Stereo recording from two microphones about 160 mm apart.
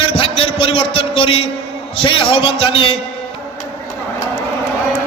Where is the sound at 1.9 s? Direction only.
35° left (ahead or behind).